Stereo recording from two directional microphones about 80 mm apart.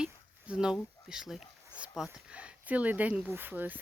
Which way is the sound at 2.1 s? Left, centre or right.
Centre.